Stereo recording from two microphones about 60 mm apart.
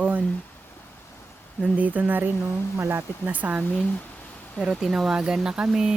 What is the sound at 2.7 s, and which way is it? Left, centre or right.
Speech, right.